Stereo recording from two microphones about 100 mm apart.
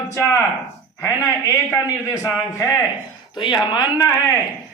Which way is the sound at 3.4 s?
45° left (ahead or behind).